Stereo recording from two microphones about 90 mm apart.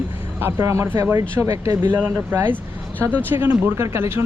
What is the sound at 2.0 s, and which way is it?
Speech, 20° right (ahead or behind).